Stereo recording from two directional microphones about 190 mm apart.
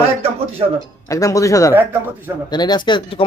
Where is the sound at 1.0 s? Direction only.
15° left (ahead or behind).